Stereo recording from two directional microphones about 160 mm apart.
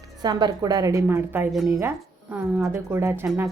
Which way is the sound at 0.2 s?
25° right (ahead or behind).